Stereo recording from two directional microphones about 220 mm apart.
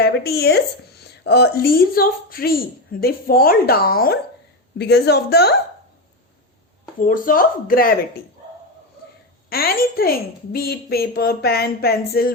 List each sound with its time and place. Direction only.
0.0 s speech: 45° left (ahead or behind)
7.0 s speech: 40° left (ahead or behind)
9.5 s speech: 40° left (ahead or behind)